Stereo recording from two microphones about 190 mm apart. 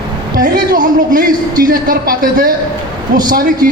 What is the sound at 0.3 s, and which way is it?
A man's voice, 50° right (ahead or behind).